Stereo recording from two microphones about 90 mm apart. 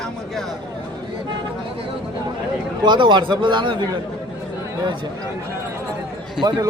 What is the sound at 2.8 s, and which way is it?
A man's voice, 60° right (ahead or behind).